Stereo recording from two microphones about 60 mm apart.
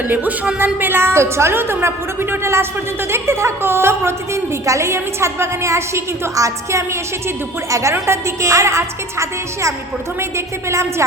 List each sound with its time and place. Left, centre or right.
0.1 s a woman's voice: right
4.6 s a woman's voice: right